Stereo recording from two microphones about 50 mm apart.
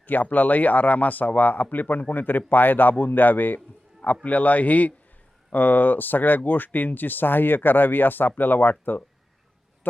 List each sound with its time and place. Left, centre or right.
0.0 s a man's voice: left